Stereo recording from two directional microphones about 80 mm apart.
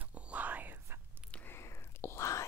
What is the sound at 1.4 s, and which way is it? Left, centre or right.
Whispering, left.